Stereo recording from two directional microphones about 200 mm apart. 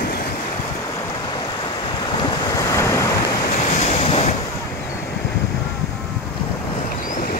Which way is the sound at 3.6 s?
35° left (ahead or behind).